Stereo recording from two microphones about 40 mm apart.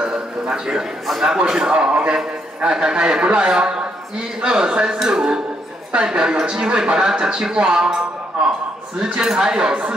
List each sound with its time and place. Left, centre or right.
0.1 s a sound: centre
1.0 s a man's voice: centre
1.3 s a man's voice: right
4.8 s a man's voice: centre
9.0 s speech: centre
9.6 s a man's voice: right